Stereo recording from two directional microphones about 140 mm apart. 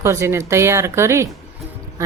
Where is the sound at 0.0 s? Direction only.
20° right (ahead or behind).